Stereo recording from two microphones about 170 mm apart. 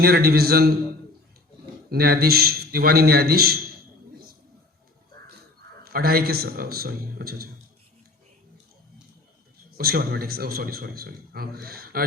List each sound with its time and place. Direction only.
0.0 s a man's voice: 65° right (ahead or behind)
1.9 s a man's voice: 65° right (ahead or behind)
5.8 s a man's voice: 65° right (ahead or behind)
9.7 s a man's voice: 60° right (ahead or behind)